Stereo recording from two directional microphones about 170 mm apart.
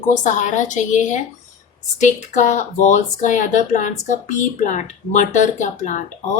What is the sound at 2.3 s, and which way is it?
Speech, 45° left (ahead or behind).